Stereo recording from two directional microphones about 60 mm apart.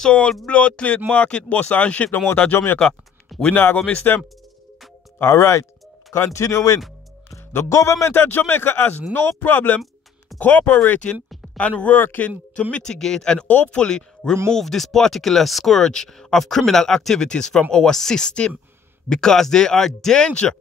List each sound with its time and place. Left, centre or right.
0.0 s speech: centre
2.5 s a man's voice: left
2.8 s speech: centre
3.7 s speech: left
5.2 s speech: left
6.4 s speech: left
7.2 s a man's voice: left
12.7 s speech: centre
20.2 s speech: centre